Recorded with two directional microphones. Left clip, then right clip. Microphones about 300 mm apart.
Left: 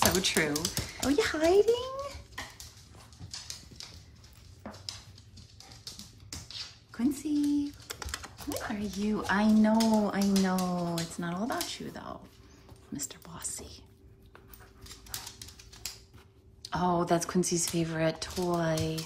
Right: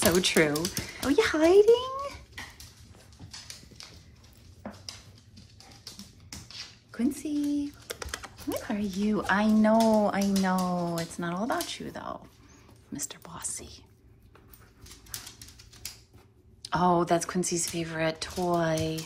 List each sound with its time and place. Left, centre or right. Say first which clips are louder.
0.2 s speech: right 4 dB; centre
6.9 s speech: even; centre
16.6 s speech: right 4 dB; centre